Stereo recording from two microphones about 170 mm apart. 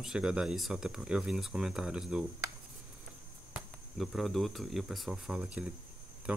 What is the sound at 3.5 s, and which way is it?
Speech, centre (ahead or behind).